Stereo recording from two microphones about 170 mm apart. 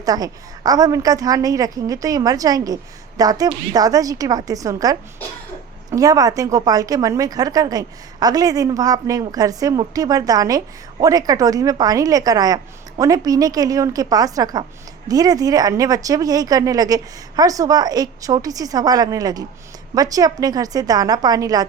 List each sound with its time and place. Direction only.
0.0 s a woman's voice: 20° right (ahead or behind)